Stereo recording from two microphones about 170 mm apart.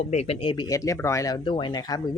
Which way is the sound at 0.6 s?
20° left (ahead or behind).